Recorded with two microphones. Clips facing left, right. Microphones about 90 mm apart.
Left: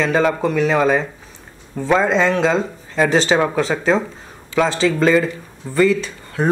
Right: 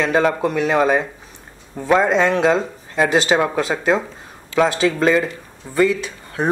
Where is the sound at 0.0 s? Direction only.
Centre (ahead or behind).